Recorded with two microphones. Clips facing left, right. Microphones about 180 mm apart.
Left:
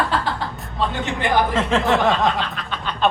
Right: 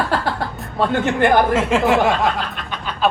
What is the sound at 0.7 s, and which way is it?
Speech, 60° right (ahead or behind).